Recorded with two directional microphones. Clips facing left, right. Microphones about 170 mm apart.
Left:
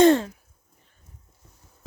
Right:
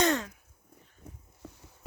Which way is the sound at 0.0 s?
30° left (ahead or behind).